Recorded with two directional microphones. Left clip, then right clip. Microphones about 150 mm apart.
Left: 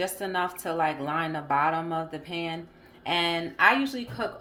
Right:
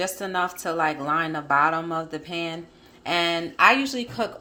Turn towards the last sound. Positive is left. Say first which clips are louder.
# right 4 dB
turn(degrees=-35)  # may be behind; listen again after turning